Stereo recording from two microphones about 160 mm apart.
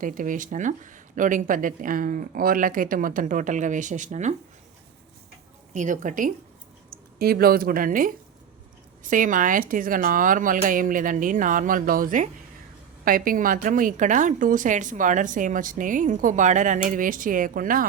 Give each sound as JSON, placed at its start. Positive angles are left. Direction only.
{"t": 0.0, "sound": "a woman's voice", "side_deg": -55}
{"t": 5.7, "sound": "a woman's voice", "side_deg": -50}
{"t": 7.2, "sound": "a woman's voice", "side_deg": -70}